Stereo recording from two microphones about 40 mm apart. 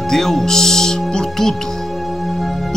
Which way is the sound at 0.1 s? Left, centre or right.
Centre.